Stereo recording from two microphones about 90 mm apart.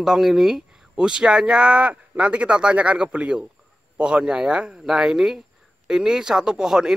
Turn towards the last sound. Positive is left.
turn(degrees=-5)  # may be behind; listen again after turning